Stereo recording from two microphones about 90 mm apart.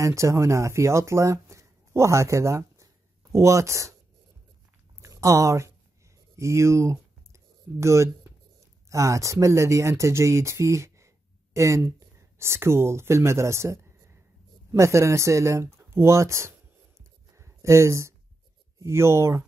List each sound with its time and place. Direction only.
0.0 s speech: 35° right (ahead or behind)
5.0 s speech: 35° right (ahead or behind)
6.3 s a sound: 35° right (ahead or behind)
8.9 s speech: 35° right (ahead or behind)
17.4 s a sound: 35° right (ahead or behind)
18.8 s speech: 30° right (ahead or behind)